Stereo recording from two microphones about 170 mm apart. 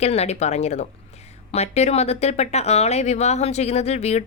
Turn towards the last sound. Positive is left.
turn(degrees=40)  # may be behind; listen again after turning